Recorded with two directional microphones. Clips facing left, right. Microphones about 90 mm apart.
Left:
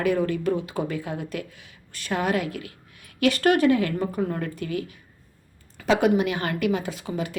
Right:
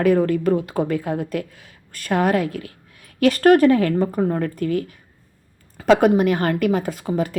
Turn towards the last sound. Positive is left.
turn(degrees=-40)  # may be behind; listen again after turning